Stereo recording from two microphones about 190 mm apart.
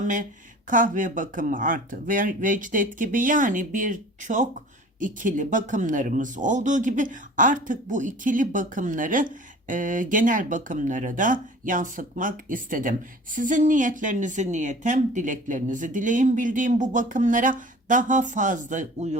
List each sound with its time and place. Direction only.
0.0 s speech: 45° right (ahead or behind)